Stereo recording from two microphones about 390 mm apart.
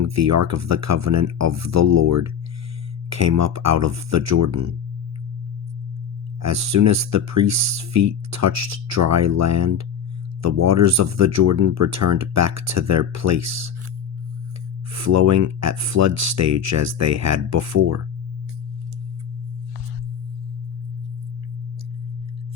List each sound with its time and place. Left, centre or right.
0.0 s speech: right
6.4 s speech: right
14.9 s speech: right